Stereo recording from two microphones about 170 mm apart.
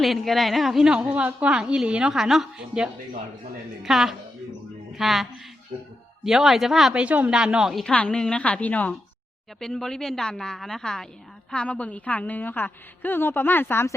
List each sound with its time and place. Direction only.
0.0 s a woman's voice: centre (ahead or behind)